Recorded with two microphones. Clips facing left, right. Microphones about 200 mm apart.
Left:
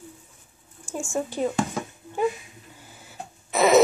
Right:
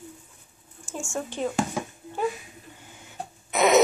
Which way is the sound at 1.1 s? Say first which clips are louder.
Left 3 dB; 10° left (ahead or behind).